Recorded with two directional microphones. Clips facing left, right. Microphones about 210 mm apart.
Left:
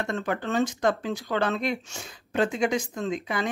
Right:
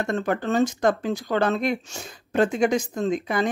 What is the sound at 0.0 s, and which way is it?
Speech, 45° right (ahead or behind).